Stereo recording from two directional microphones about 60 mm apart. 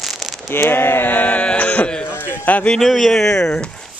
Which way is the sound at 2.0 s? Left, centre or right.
Left.